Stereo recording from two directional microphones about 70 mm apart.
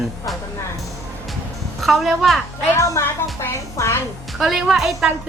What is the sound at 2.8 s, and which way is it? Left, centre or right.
A child's voice, left.